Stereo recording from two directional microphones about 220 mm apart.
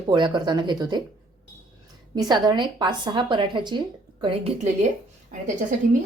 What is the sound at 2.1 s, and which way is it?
A woman's voice, 20° right (ahead or behind).